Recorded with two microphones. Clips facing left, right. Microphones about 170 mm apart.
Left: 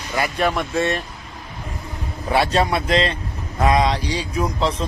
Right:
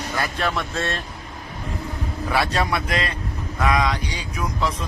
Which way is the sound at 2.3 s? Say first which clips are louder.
Left 4 dB; 25° left (ahead or behind).